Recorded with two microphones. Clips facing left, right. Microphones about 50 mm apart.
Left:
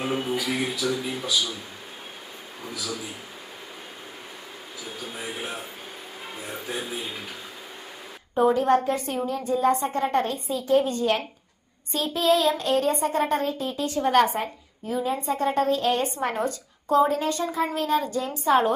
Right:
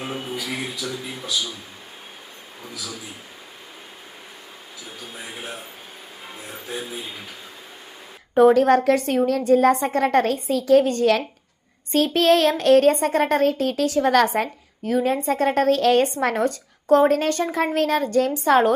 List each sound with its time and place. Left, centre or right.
0.0 s speech: centre
2.6 s speech: centre
5.1 s speech: centre
8.4 s a woman's voice: right
11.9 s speech: right
16.5 s a woman's voice: right